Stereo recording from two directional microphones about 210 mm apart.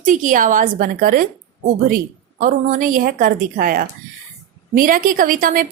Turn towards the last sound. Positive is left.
turn(degrees=-40)  # may be behind; listen again after turning